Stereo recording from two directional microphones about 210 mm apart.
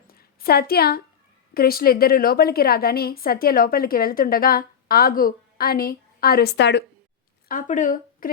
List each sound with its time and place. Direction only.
0.1 s a sound: 45° left (ahead or behind)
1.5 s a woman's voice: 45° left (ahead or behind)
7.4 s speech: 40° left (ahead or behind)